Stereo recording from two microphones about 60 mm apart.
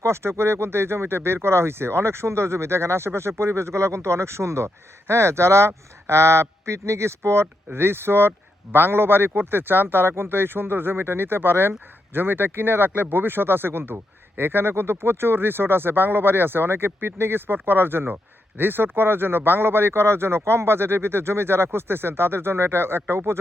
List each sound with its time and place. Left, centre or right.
0.0 s speech: right